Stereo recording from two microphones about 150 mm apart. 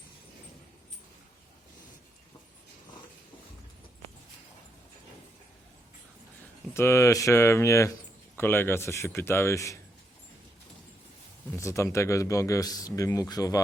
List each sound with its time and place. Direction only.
6.7 s a man's voice: 20° left (ahead or behind)
11.5 s a man's voice: 20° left (ahead or behind)